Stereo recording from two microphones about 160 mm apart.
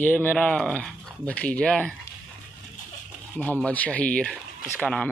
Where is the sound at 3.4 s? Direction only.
10° left (ahead or behind).